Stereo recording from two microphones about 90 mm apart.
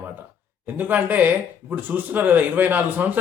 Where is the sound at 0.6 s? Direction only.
20° right (ahead or behind).